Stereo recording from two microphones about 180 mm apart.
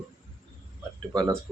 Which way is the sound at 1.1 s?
20° right (ahead or behind).